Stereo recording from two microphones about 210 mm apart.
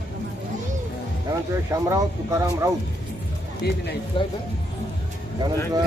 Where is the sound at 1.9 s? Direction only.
15° right (ahead or behind).